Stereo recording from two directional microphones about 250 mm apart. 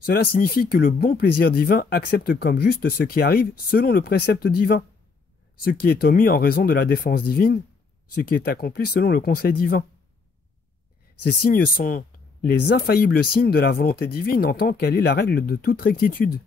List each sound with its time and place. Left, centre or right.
0.0 s speech: left
11.2 s speech: left